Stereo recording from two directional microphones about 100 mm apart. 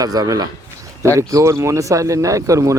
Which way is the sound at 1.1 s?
30° right (ahead or behind).